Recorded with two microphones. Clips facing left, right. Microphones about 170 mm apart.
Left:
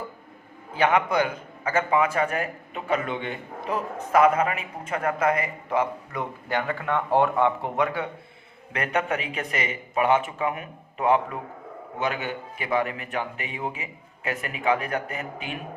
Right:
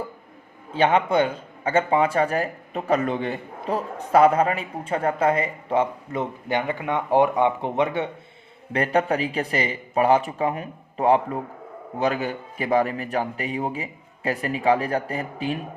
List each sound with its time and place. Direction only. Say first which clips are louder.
0.7 s speech: right 2 dB; 30° right (ahead or behind)
8.7 s a man's voice: right 5 dB; 35° right (ahead or behind)